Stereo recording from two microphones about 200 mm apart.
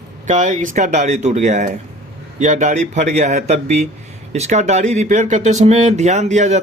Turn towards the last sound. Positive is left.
turn(degrees=-35)  # may be behind; listen again after turning